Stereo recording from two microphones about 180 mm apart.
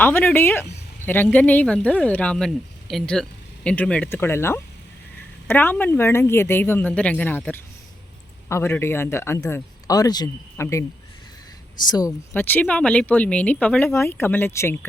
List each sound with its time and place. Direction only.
0.0 s speech: 10° left (ahead or behind)
11.9 s speech: 20° left (ahead or behind)